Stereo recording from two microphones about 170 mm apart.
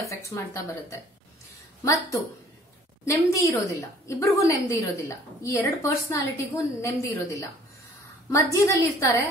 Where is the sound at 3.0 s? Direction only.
20° left (ahead or behind).